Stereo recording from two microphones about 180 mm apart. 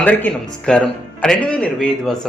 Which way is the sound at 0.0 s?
5° left (ahead or behind).